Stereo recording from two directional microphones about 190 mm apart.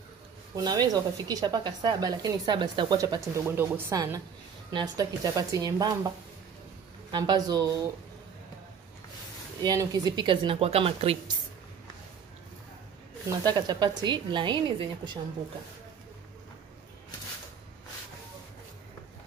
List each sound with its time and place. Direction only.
0.6 s speech: 20° right (ahead or behind)
9.6 s speech: 20° right (ahead or behind)
13.4 s speech: 20° right (ahead or behind)